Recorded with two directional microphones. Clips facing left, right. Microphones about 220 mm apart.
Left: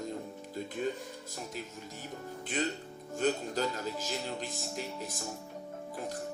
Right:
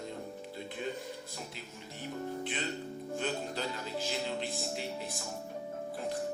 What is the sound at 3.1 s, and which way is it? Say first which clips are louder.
Speech: left 6 dB; 45° left (ahead or behind).